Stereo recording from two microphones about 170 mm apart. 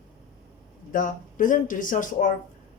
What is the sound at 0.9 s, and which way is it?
Speech, 50° left (ahead or behind).